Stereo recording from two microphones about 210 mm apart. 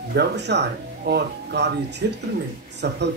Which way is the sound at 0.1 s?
50° right (ahead or behind).